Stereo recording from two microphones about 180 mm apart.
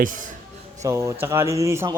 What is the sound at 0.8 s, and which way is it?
Speech, 15° right (ahead or behind).